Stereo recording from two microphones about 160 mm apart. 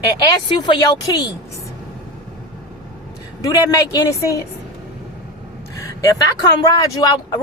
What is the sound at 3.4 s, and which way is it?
Speech, 20° left (ahead or behind).